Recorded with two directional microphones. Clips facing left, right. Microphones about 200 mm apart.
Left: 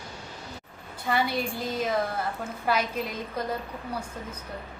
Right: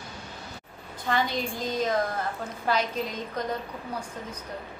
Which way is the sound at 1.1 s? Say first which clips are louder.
Left 1 dB; 10° left (ahead or behind).